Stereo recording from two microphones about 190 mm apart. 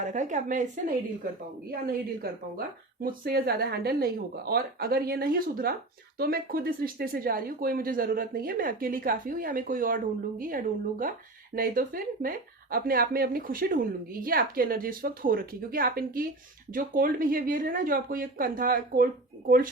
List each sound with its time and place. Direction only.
0.0 s a woman's voice: 40° right (ahead or behind)
1.7 s speech: 55° right (ahead or behind)